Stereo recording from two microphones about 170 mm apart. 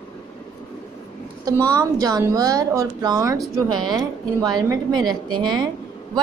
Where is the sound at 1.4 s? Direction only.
20° right (ahead or behind).